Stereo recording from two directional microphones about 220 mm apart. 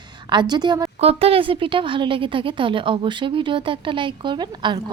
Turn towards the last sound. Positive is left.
turn(degrees=-20)  # may be behind; listen again after turning